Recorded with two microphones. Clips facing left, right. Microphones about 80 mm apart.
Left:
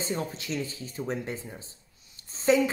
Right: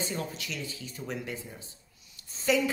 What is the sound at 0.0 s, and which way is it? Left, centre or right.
Speech, left.